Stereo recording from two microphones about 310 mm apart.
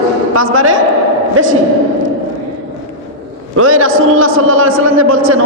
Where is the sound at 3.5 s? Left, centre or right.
Right.